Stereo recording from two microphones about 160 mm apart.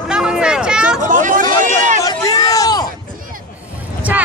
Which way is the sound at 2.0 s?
25° left (ahead or behind).